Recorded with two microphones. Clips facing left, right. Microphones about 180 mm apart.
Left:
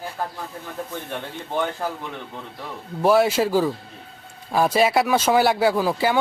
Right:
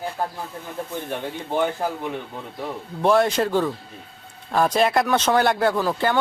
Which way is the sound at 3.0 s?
5° left (ahead or behind).